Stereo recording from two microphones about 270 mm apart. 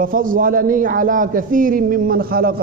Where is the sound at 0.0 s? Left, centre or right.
Right.